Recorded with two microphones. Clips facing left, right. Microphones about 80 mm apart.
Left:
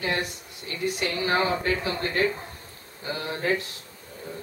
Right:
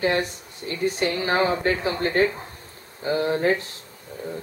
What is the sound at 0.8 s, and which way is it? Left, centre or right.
Speech, right.